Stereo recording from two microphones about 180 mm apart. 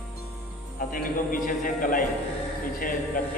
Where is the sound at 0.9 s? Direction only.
50° left (ahead or behind).